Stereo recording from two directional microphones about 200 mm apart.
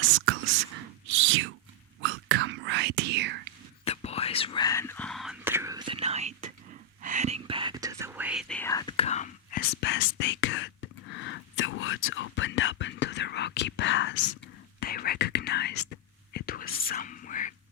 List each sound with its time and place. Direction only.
1.0 s a sound: 75° right (ahead or behind)
2.0 s whispering: 70° right (ahead or behind)
3.8 s whispering: 30° left (ahead or behind); by 8.7 s 5° left (ahead or behind)
8.7 s whispering: 20° left (ahead or behind)
9.0 s whispering: 35° left (ahead or behind); by 14.2 s 65° left (ahead or behind)
14.8 s whispering: 50° left (ahead or behind)